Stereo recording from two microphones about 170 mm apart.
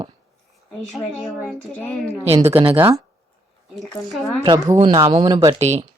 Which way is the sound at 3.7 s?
Centre (ahead or behind).